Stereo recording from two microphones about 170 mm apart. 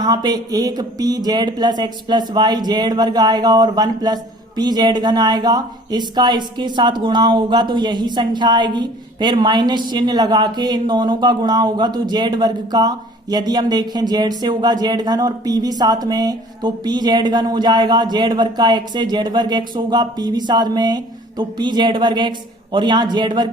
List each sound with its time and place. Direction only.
0.0 s speech: 25° right (ahead or behind)